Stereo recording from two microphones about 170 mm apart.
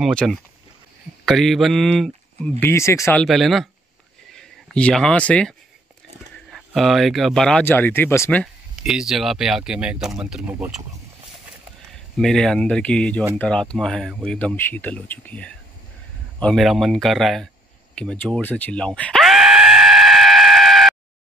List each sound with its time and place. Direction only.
0.0 s speech: 5° left (ahead or behind)
2.6 s speech: 15° left (ahead or behind)
3.3 s speech: centre (ahead or behind)
8.8 s speech: 5° right (ahead or behind)
11.9 s speech: centre (ahead or behind)
19.9 s a sound: centre (ahead or behind)